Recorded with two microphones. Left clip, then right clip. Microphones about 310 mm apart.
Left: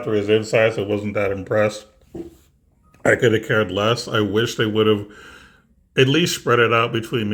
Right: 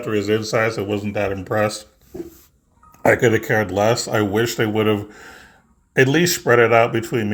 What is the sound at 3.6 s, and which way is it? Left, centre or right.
Speech, centre.